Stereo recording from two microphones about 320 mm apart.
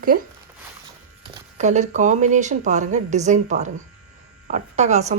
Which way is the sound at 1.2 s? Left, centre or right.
Right.